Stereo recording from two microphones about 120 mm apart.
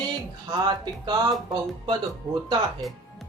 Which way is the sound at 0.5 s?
35° right (ahead or behind).